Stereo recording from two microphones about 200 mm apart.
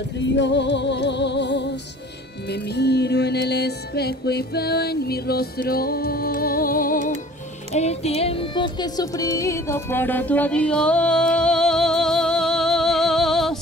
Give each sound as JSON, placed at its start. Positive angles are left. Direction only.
{"t": 0.2, "sound": "music", "side_deg": 60}
{"t": 7.7, "sound": "music", "side_deg": 30}